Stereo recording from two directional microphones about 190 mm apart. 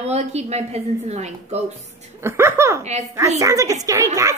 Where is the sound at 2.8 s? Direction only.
35° right (ahead or behind).